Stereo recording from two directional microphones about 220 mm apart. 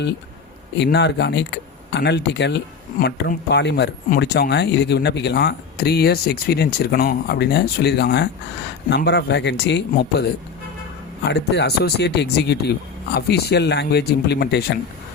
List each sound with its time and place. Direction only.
0.8 s speech: 50° left (ahead or behind)
11.3 s speech: 50° left (ahead or behind)